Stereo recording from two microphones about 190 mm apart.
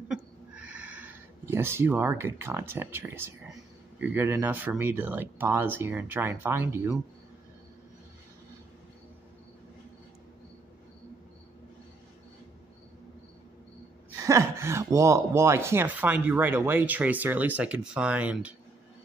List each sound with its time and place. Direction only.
0.1 s a sound: 5° right (ahead or behind)
4.0 s speech: 10° right (ahead or behind)
14.2 s speech: 15° right (ahead or behind)